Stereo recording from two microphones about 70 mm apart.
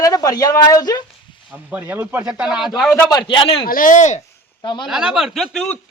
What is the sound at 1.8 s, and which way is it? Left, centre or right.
Speech, right.